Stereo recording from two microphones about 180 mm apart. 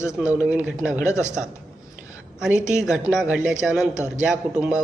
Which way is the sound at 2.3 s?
5° right (ahead or behind).